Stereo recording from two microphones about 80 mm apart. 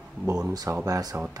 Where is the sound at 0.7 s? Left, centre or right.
Right.